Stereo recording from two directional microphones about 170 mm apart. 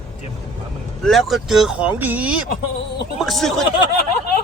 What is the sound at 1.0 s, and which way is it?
Speech, centre (ahead or behind).